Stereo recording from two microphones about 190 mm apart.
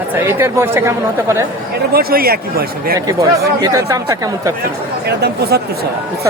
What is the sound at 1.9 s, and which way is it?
Speech, 50° right (ahead or behind).